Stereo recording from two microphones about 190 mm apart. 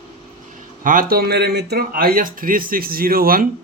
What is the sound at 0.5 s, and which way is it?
Speech, 45° right (ahead or behind).